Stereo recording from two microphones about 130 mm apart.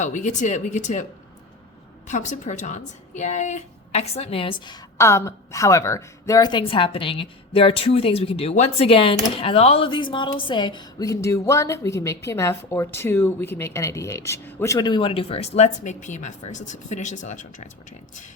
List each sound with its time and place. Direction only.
0.0 s speech: 65° left (ahead or behind)
2.0 s speech: 70° left (ahead or behind); by 4.8 s 35° left (ahead or behind)
4.9 s a woman's voice: 20° left (ahead or behind); by 8.9 s 55° left (ahead or behind)
8.9 s a woman's voice: 45° left (ahead or behind); by 17.4 s 70° left (ahead or behind)